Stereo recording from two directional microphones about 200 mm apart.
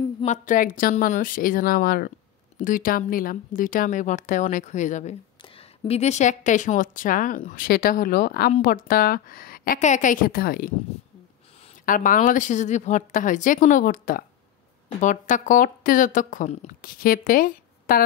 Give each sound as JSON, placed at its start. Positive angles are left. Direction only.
{"t": 0.2, "sound": "a woman's voice", "side_deg": 40}
{"t": 11.8, "sound": "a woman's voice", "side_deg": 45}